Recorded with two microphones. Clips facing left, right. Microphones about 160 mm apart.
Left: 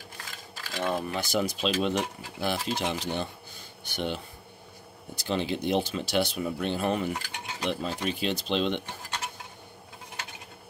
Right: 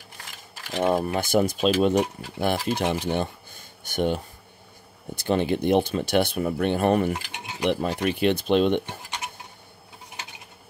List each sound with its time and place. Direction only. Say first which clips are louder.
0.7 s speech: right 7 dB; 50° right (ahead or behind)
7.2 s a sound: right 4 dB; 20° right (ahead or behind)
7.7 s speech: right 6 dB; 60° right (ahead or behind)